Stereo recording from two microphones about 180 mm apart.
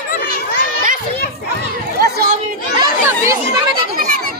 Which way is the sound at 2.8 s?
15° right (ahead or behind).